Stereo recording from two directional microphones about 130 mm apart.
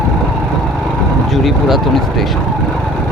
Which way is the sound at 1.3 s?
Centre (ahead or behind).